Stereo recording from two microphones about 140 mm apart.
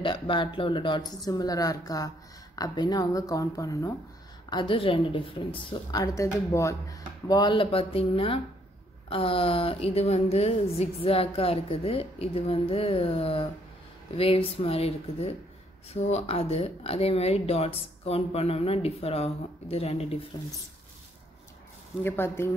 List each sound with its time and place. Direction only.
0.0 s a woman's voice: 35° left (ahead or behind)
4.5 s a woman's voice: 35° left (ahead or behind)
22.0 s speech: 15° left (ahead or behind)